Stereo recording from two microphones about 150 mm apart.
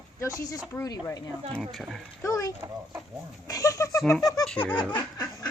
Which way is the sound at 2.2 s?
20° left (ahead or behind).